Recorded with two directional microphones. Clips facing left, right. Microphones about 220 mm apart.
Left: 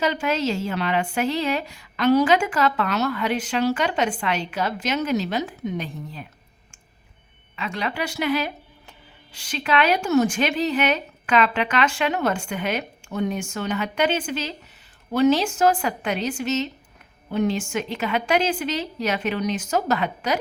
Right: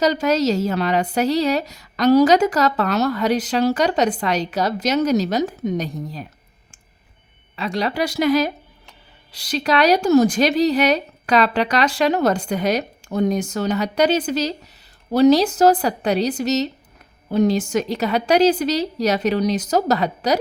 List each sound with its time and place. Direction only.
0.0 s a woman's voice: 40° right (ahead or behind)
7.5 s a woman's voice: 35° right (ahead or behind)